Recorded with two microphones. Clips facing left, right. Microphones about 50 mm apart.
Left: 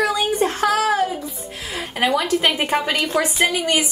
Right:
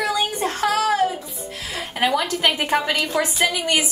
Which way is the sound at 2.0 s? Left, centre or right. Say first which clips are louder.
Left 1 dB; centre.